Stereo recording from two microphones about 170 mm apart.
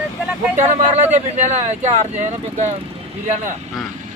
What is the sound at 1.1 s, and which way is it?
Speech, 40° right (ahead or behind).